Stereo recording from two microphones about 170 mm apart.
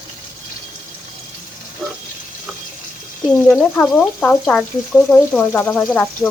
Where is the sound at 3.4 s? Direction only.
5° left (ahead or behind).